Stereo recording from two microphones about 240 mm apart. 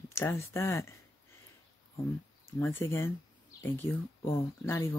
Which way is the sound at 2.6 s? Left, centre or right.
Centre.